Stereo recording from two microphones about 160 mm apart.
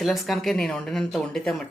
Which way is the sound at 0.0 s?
Centre (ahead or behind).